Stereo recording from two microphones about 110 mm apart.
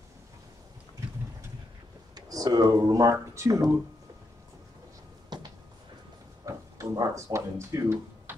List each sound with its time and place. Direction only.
2.1 s speech: 35° right (ahead or behind)
5.3 s a sound: 40° right (ahead or behind)
6.4 s speech: 30° right (ahead or behind)